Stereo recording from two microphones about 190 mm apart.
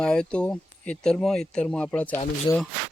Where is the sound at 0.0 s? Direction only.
5° left (ahead or behind).